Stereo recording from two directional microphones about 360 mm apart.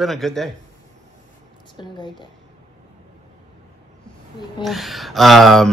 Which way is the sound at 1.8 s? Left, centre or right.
Centre.